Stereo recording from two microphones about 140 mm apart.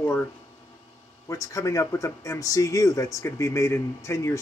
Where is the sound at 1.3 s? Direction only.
25° left (ahead or behind).